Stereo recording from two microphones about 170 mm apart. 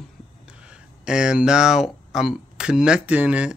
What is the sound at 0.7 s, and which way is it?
Speech, 5° right (ahead or behind).